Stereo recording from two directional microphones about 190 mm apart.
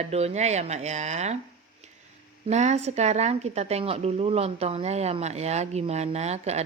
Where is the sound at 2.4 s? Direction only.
35° right (ahead or behind).